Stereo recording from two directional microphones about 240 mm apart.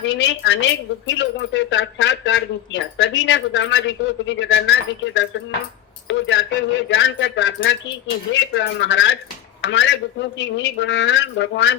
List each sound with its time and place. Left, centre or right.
0.0 s a woman's voice: left